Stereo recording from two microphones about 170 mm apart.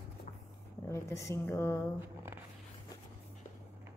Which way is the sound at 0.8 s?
15° left (ahead or behind).